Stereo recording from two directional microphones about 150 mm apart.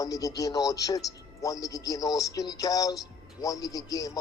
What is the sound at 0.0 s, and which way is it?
A man's voice, 25° left (ahead or behind).